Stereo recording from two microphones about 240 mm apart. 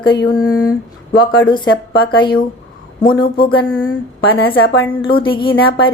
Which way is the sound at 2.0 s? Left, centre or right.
Centre.